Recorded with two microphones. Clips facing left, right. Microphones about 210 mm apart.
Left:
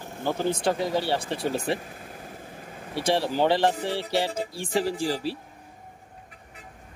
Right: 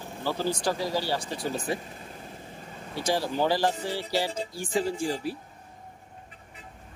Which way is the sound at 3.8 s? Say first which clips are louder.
Left 3 dB; 60° left (ahead or behind).